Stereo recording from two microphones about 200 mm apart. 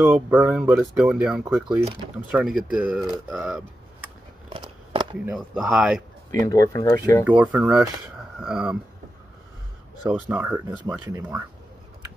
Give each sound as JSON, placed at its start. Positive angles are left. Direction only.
{"t": 0.0, "sound": "speech", "side_deg": -10}
{"t": 4.5, "sound": "scissors", "side_deg": -25}
{"t": 5.2, "sound": "speech", "side_deg": -5}
{"t": 6.4, "sound": "speech", "side_deg": 15}
{"t": 7.2, "sound": "speech", "side_deg": -5}
{"t": 10.0, "sound": "speech", "side_deg": -10}